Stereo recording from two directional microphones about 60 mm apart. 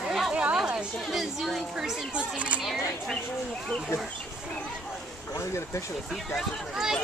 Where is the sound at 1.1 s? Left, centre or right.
Centre.